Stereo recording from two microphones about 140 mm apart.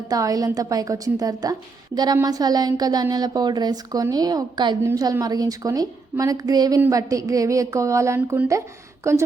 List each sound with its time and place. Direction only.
0.1 s a woman's voice: 25° right (ahead or behind)